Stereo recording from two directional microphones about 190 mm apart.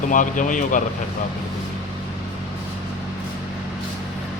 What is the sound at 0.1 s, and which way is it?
Speech, 45° left (ahead or behind).